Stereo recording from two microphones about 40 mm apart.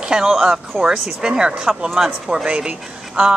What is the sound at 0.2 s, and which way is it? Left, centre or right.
Speech, centre.